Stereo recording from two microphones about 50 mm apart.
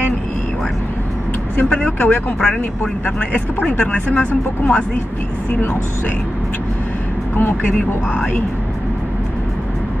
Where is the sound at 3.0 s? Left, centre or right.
Left.